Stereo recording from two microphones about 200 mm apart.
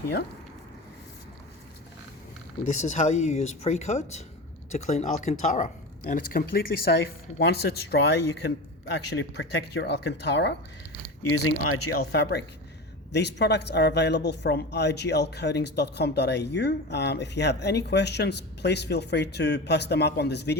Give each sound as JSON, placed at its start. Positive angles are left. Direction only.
{"t": 2.6, "sound": "speech", "side_deg": 40}
{"t": 11.7, "sound": "speech", "side_deg": 55}